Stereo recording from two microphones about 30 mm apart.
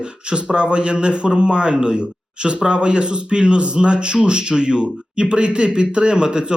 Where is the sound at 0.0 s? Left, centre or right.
Right.